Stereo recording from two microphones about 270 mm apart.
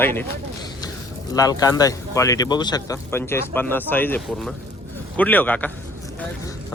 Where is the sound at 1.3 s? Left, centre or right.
Centre.